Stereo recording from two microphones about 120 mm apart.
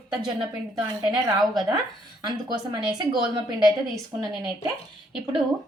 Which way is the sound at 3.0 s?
35° right (ahead or behind).